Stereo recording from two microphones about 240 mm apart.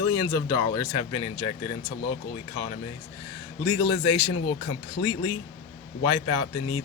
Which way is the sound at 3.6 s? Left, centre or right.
Centre.